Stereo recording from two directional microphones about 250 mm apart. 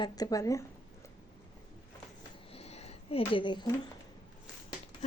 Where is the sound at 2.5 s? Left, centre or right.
Left.